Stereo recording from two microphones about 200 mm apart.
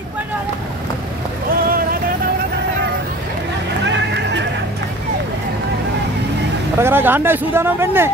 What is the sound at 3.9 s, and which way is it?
Neigh, 65° right (ahead or behind).